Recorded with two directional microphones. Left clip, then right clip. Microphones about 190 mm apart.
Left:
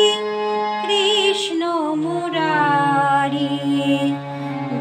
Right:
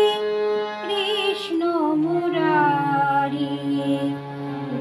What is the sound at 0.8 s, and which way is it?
Music, 20° left (ahead or behind).